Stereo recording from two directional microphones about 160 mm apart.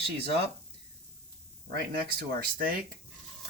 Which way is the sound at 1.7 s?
70° right (ahead or behind).